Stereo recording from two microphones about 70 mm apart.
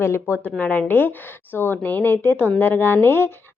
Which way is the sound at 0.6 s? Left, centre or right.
Left.